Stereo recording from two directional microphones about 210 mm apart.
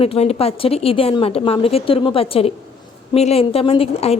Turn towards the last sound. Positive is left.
turn(degrees=30)  # may be behind; listen again after turning